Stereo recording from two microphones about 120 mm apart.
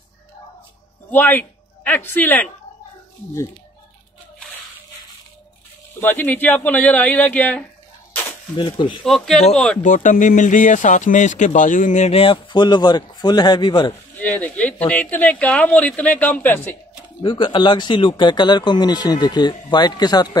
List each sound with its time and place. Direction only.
1.1 s speech: 15° left (ahead or behind)
5.9 s speech: 15° left (ahead or behind)
8.1 s a sound: 15° left (ahead or behind)
8.5 s speech: 40° left (ahead or behind)
9.0 s speech: centre (ahead or behind)
9.8 s speech: 90° left; by 13.9 s 40° left (ahead or behind)
14.1 s speech: 15° left (ahead or behind)
17.2 s speech: 45° left (ahead or behind)